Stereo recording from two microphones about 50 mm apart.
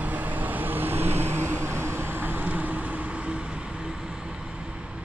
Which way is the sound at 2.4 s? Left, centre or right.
Right.